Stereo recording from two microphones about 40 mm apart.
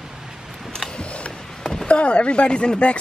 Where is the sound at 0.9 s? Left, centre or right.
Left.